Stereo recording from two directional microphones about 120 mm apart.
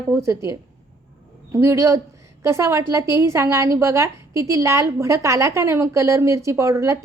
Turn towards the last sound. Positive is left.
turn(degrees=-25)  # may be behind; listen again after turning